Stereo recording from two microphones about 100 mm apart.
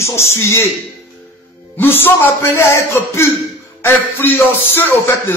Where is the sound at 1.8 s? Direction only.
20° left (ahead or behind).